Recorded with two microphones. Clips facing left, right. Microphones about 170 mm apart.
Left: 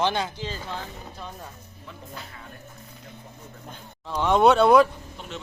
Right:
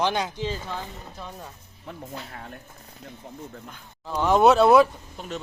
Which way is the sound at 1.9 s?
55° right (ahead or behind).